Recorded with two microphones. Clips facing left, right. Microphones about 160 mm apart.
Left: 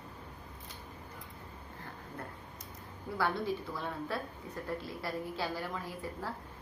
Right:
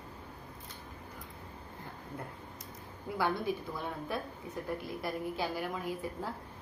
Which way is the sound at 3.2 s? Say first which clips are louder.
Right 1 dB; 15° right (ahead or behind).